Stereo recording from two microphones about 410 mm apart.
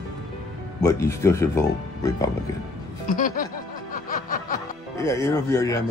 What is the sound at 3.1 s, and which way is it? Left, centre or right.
Speech, centre.